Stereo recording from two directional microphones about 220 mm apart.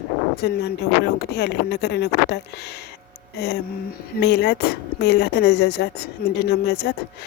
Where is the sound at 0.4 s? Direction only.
50° left (ahead or behind).